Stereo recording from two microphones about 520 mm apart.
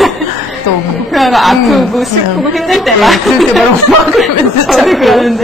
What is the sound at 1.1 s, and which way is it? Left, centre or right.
Speech, centre.